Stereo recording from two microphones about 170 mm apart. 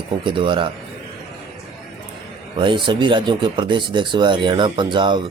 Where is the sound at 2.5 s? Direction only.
30° right (ahead or behind).